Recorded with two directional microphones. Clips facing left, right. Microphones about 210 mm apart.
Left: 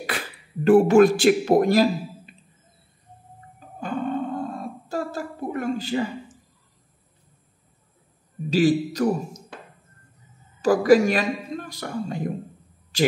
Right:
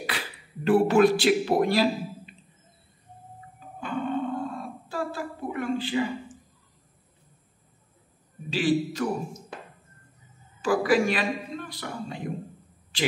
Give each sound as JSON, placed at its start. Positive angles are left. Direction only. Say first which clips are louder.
{"t": 0.1, "sound": "beatboxing", "louder": "left 3 dB", "side_deg": 50}
{"t": 0.7, "sound": "speech", "louder": "left 5 dB", "side_deg": 45}
{"t": 3.5, "sound": "music", "louder": "left 3 dB", "side_deg": 45}
{"t": 4.8, "sound": "a woman's voice", "louder": "left 3 dB", "side_deg": 45}
{"t": 8.5, "sound": "a man's voice", "louder": "left 5 dB", "side_deg": 40}
{"t": 10.6, "sound": "speech", "louder": "left 6 dB", "side_deg": 40}